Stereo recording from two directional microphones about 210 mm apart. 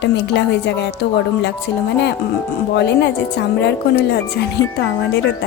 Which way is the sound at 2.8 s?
55° left (ahead or behind).